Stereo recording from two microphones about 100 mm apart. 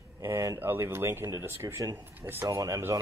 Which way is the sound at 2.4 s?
35° right (ahead or behind).